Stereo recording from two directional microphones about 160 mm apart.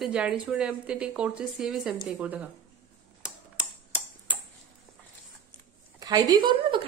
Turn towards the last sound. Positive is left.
turn(degrees=-30)  # may be behind; listen again after turning